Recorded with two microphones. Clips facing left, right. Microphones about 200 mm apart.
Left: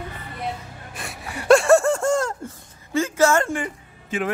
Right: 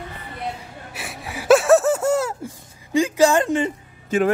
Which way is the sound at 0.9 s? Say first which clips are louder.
Right 1 dB; centre (ahead or behind).